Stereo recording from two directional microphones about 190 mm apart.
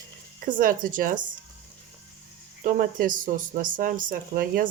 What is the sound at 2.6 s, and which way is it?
Speech, 45° right (ahead or behind).